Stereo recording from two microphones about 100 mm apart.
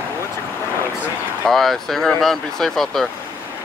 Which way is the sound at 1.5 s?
Centre (ahead or behind).